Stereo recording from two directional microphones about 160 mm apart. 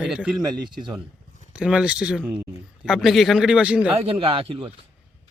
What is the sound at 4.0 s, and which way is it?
Speech, 35° right (ahead or behind).